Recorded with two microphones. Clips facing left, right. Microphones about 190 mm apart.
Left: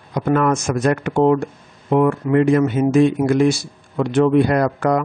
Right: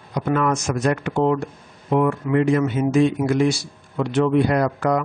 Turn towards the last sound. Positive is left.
turn(degrees=55)  # may be behind; listen again after turning